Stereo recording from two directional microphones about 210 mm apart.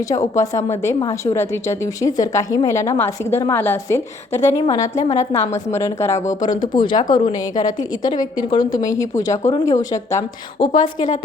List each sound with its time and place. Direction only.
0.3 s a woman's voice: 15° left (ahead or behind)
10.7 s a woman's voice: 35° left (ahead or behind)